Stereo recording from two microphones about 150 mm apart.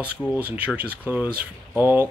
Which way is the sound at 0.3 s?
10° right (ahead or behind).